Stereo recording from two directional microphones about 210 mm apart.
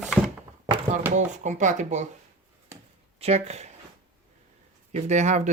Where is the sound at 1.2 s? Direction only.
35° right (ahead or behind).